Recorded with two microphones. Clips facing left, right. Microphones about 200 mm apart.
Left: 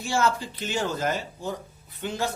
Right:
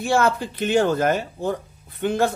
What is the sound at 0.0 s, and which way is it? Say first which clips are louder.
Speech: right 5 dB; 60° right (ahead or behind).